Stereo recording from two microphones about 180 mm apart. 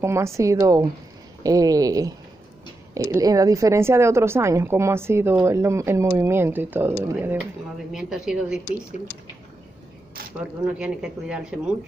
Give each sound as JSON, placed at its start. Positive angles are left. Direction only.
{"t": 0.0, "sound": "speech", "side_deg": -15}
{"t": 10.6, "sound": "speech", "side_deg": -5}